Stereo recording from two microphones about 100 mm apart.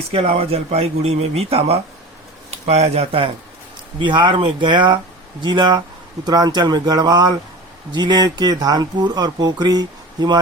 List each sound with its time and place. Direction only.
0.1 s speech: 90° right
3.9 s speech: 50° right (ahead or behind)